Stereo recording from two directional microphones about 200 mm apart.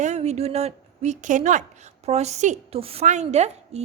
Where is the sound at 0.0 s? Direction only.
35° right (ahead or behind).